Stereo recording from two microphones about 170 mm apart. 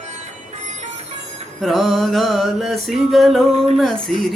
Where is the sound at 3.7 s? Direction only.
Centre (ahead or behind).